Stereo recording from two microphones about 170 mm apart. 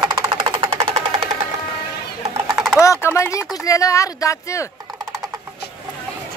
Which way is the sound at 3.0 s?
15° left (ahead or behind).